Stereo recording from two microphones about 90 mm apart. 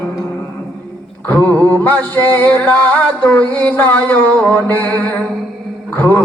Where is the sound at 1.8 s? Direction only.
20° left (ahead or behind).